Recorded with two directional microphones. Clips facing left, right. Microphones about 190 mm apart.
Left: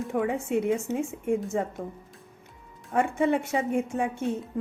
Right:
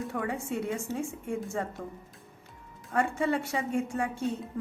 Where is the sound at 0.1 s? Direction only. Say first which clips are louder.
Left 6 dB; 20° left (ahead or behind).